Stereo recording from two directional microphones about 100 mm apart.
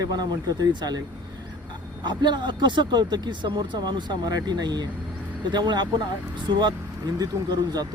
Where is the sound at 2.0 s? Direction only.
50° right (ahead or behind).